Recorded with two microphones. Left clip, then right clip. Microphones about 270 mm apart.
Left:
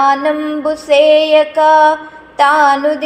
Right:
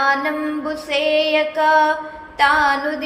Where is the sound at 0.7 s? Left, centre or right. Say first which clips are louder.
Left 10 dB; centre.